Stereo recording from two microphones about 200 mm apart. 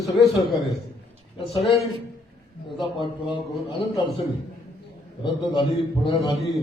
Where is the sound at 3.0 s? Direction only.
25° left (ahead or behind).